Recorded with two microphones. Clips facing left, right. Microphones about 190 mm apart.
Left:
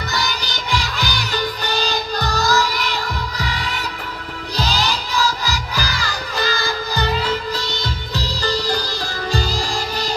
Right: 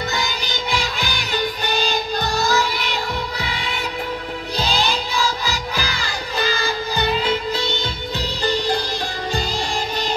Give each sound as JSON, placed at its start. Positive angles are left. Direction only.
{"t": 0.1, "sound": "music", "side_deg": 40}
{"t": 5.4, "sound": "crowd", "side_deg": 40}
{"t": 7.2, "sound": "music", "side_deg": 40}